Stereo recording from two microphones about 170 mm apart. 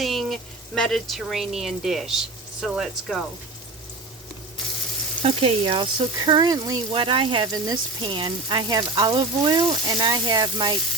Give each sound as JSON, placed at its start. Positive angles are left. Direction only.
{"t": 0.0, "sound": "speech", "side_deg": 0}
{"t": 5.2, "sound": "speech", "side_deg": -35}